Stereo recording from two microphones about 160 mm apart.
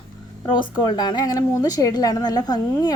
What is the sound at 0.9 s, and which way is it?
A woman's voice, 25° left (ahead or behind).